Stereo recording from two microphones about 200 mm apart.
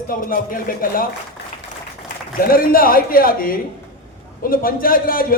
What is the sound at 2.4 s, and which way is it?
A man's voice, 45° left (ahead or behind).